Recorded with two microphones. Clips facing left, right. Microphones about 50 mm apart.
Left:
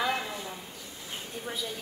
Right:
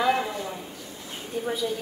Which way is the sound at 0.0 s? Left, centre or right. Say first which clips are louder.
Right 6 dB; centre.